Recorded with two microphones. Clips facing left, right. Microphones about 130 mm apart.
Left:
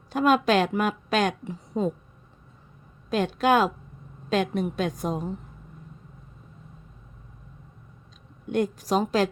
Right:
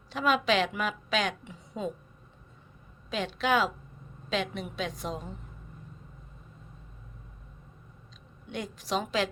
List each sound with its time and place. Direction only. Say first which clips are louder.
0.1 s a woman's voice: left 6 dB; 45° left (ahead or behind)
3.1 s a woman's voice: left 6 dB; 45° left (ahead or behind)
8.4 s a woman's voice: left 10 dB; 45° left (ahead or behind)